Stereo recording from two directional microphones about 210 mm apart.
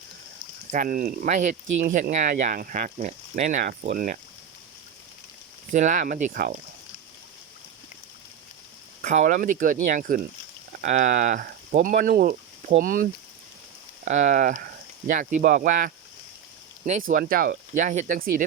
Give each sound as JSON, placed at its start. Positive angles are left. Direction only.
{"t": 0.7, "sound": "speech", "side_deg": -40}
{"t": 5.7, "sound": "speech", "side_deg": -35}
{"t": 9.0, "sound": "speech", "side_deg": -35}
{"t": 17.1, "sound": "speech", "side_deg": -40}